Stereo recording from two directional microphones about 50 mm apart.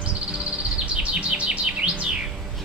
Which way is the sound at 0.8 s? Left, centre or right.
Right.